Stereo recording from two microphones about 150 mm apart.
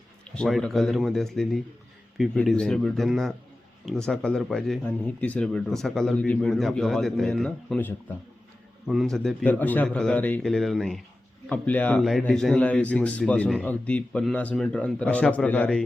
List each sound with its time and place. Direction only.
0.3 s speech: 5° left (ahead or behind)